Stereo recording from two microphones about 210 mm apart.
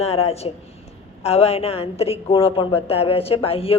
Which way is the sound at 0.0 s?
30° left (ahead or behind).